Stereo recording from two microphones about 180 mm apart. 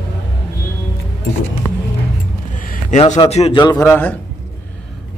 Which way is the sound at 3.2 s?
35° left (ahead or behind).